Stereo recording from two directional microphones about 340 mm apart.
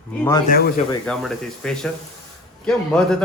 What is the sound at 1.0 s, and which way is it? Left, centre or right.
A man's voice, centre.